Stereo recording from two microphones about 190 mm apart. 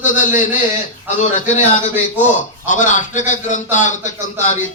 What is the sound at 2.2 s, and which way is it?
A man's voice, 40° left (ahead or behind).